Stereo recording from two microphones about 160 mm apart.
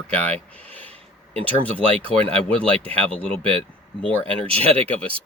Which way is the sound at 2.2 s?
10° left (ahead or behind).